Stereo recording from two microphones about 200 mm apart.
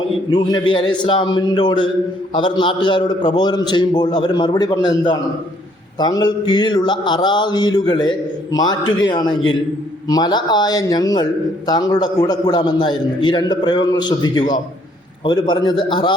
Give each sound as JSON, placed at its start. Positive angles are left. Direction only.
{"t": 0.3, "sound": "a man's voice", "side_deg": 20}